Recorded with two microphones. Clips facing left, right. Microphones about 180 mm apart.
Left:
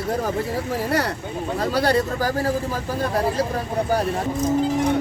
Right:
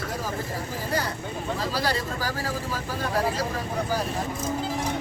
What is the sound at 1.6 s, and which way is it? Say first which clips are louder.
Speech: left 9 dB; 55° left (ahead or behind).